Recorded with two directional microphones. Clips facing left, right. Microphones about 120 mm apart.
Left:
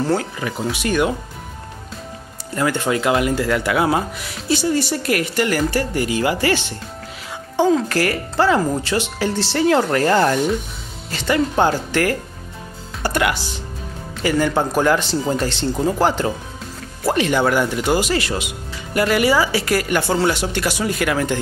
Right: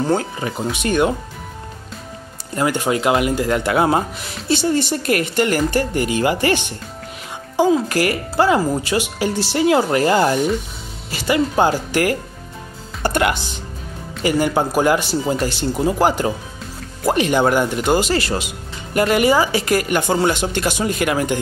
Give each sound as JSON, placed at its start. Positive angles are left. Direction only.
{"t": 0.2, "sound": "speech", "side_deg": -30}
{"t": 2.5, "sound": "speech", "side_deg": -15}
{"t": 13.0, "sound": "music", "side_deg": -20}
{"t": 14.2, "sound": "speech", "side_deg": -15}
{"t": 18.1, "sound": "speech", "side_deg": -35}
{"t": 18.9, "sound": "speech", "side_deg": -25}